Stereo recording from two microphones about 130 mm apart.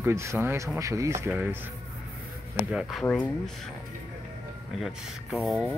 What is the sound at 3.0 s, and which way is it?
Speech, 10° left (ahead or behind).